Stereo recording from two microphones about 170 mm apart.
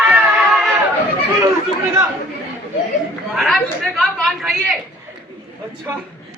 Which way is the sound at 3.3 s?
5° left (ahead or behind).